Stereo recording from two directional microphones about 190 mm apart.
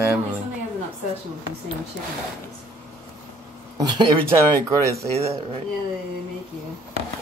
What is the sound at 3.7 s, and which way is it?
Speech, 20° right (ahead or behind).